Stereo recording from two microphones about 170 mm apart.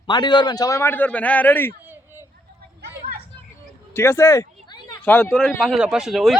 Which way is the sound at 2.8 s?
80° right.